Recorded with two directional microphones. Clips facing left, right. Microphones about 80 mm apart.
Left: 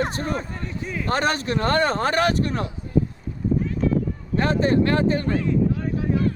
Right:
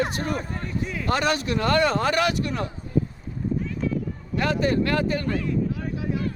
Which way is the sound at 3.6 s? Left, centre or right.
Left.